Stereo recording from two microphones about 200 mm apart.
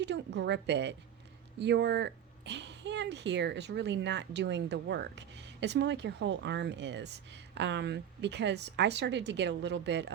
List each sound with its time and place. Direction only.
0.0 s speech: 60° right (ahead or behind)